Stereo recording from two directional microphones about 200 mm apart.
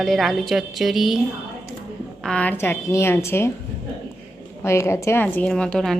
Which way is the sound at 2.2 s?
5° left (ahead or behind).